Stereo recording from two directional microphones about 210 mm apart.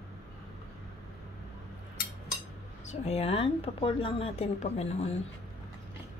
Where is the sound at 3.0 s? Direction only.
30° left (ahead or behind).